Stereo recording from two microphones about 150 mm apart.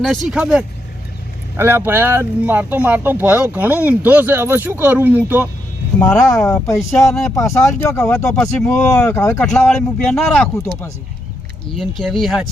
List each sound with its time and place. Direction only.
0.0 s speech: centre (ahead or behind)
1.5 s speech: 15° right (ahead or behind)
6.1 s speech: 25° left (ahead or behind)
8.0 s speech: 5° left (ahead or behind)
10.5 s speech: 20° left (ahead or behind)
11.8 s speech: centre (ahead or behind)